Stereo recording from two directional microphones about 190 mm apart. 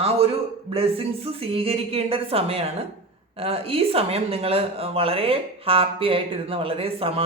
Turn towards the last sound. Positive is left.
turn(degrees=-30)  # may be behind; listen again after turning